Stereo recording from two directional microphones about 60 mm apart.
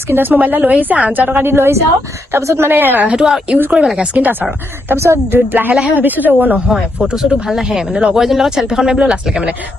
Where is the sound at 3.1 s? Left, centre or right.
Centre.